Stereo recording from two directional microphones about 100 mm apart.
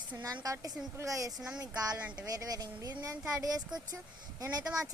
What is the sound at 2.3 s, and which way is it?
Speech, 35° right (ahead or behind).